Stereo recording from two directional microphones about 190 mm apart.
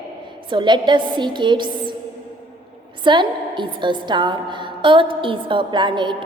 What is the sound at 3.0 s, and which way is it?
A woman's voice, 25° right (ahead or behind).